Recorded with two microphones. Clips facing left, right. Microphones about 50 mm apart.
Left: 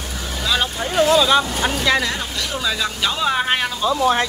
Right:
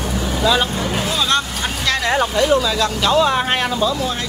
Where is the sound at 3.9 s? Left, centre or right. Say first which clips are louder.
Left 4 dB; left.